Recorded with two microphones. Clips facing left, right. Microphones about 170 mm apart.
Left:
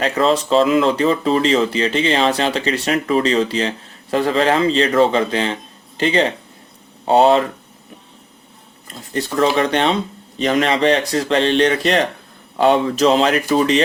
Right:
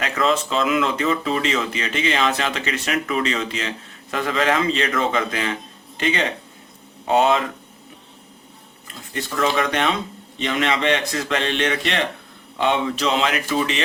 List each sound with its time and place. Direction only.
0.0 s speech: 35° left (ahead or behind)
8.9 s speech: 35° left (ahead or behind)